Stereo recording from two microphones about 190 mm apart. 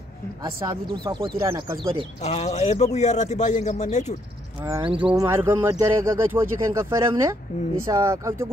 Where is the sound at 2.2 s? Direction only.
35° left (ahead or behind).